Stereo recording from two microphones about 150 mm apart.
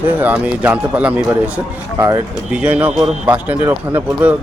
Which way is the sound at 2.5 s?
10° right (ahead or behind).